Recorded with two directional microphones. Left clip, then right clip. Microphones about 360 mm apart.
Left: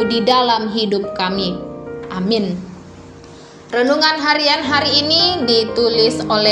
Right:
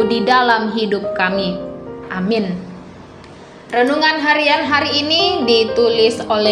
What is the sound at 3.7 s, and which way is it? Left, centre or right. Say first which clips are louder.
A woman's voice: even; centre.